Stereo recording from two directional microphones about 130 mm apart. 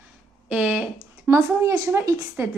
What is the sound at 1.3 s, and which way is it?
Speech, 20° right (ahead or behind).